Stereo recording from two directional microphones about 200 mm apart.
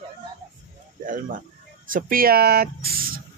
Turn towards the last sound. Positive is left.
turn(degrees=-50)  # may be behind; listen again after turning